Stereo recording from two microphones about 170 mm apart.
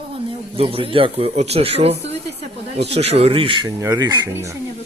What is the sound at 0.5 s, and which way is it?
Speech, 35° right (ahead or behind).